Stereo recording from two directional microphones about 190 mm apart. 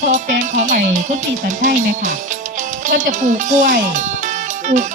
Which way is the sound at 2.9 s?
40° right (ahead or behind).